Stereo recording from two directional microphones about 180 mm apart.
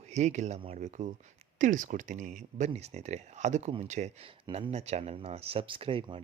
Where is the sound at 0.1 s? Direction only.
40° right (ahead or behind).